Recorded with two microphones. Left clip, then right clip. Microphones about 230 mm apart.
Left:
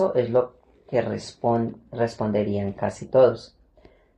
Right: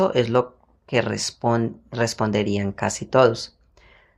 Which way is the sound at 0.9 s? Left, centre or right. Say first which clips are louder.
Right 2 dB; right.